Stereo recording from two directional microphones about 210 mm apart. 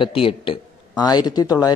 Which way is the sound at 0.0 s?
25° left (ahead or behind).